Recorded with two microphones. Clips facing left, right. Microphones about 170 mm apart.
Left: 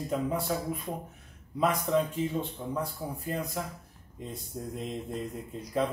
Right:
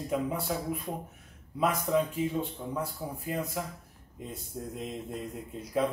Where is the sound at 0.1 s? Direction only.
5° right (ahead or behind).